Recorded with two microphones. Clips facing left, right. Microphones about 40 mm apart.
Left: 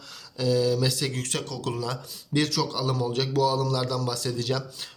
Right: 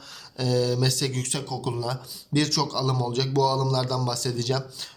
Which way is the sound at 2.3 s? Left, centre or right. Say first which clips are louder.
Right 1 dB; left.